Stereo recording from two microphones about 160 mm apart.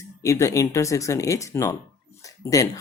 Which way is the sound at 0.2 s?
20° left (ahead or behind).